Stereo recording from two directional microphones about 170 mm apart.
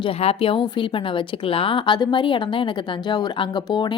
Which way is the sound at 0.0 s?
35° left (ahead or behind).